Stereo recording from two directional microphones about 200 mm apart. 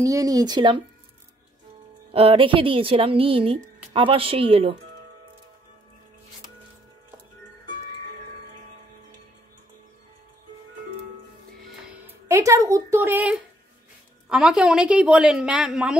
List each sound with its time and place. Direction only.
0.0 s a woman's voice: 15° right (ahead or behind)
2.1 s a woman's voice: 25° right (ahead or behind)
12.3 s a woman's voice: 15° right (ahead or behind)